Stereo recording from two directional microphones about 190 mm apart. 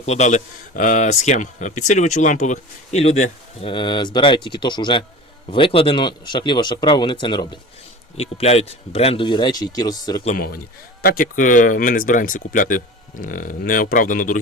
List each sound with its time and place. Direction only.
0.0 s speech: 35° left (ahead or behind)
3.7 s speech: 25° left (ahead or behind)
10.3 s speech: 50° left (ahead or behind)